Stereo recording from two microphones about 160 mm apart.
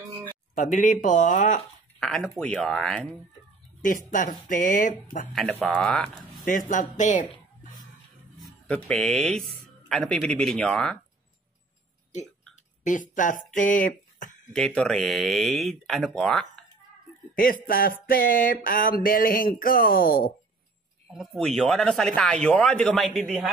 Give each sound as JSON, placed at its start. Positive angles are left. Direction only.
{"t": 0.6, "sound": "speech", "side_deg": 55}
{"t": 2.0, "sound": "a man's voice", "side_deg": 0}
{"t": 4.1, "sound": "a sound", "side_deg": 55}
{"t": 5.3, "sound": "a man's voice", "side_deg": 0}
{"t": 6.4, "sound": "speech", "side_deg": 55}
{"t": 8.4, "sound": "a man's voice", "side_deg": 5}
{"t": 12.8, "sound": "speech", "side_deg": 55}
{"t": 14.5, "sound": "a man's voice", "side_deg": 5}
{"t": 17.4, "sound": "a sound", "side_deg": 65}
{"t": 21.1, "sound": "a man's voice", "side_deg": 0}